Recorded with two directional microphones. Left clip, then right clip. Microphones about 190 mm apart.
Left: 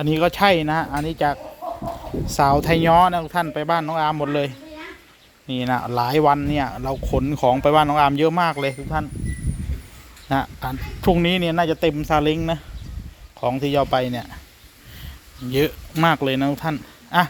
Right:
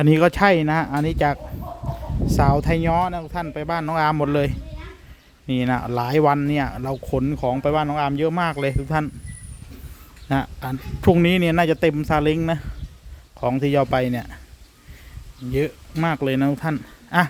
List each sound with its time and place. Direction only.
0.0 s speech: 30° right (ahead or behind); by 2.8 s 15° right (ahead or behind)
2.8 s speech: centre (ahead or behind)
3.8 s a man's voice: 30° right (ahead or behind)
8.9 s a man's voice: 40° right (ahead or behind)
10.2 s speech: 25° right (ahead or behind)
15.5 s speech: 10° right (ahead or behind)